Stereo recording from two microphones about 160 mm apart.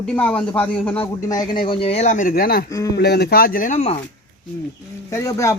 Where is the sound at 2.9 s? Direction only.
90° left; by 4.0 s 45° left (ahead or behind).